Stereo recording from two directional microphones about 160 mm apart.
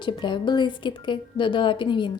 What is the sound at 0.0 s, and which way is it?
A woman's voice, 30° left (ahead or behind).